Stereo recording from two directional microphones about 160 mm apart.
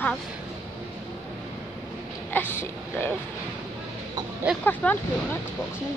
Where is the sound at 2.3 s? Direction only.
15° left (ahead or behind).